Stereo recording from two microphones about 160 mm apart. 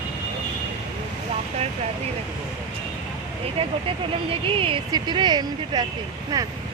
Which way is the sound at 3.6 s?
40° right (ahead or behind).